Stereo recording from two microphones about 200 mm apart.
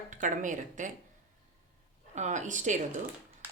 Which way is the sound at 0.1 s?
40° right (ahead or behind).